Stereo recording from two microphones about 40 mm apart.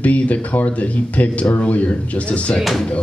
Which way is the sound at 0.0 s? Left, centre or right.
Left.